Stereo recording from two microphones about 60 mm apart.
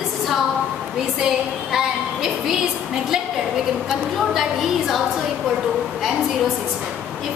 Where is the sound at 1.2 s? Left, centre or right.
Centre.